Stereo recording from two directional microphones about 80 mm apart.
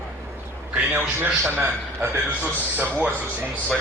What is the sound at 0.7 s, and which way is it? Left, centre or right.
Speech, right.